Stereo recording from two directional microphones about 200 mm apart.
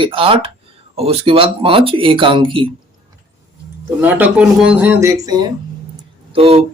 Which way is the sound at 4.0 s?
10° right (ahead or behind).